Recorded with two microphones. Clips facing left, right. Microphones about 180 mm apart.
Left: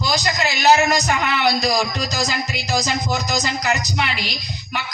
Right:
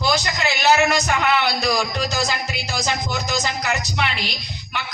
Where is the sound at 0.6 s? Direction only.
40° left (ahead or behind).